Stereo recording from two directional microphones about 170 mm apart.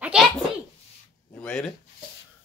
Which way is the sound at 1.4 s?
5° left (ahead or behind).